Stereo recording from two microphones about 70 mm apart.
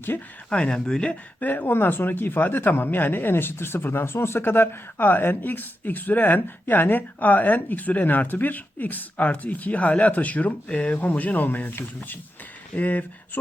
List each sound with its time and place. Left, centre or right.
0.1 s speech: left
0.5 s speech: centre
1.4 s speech: left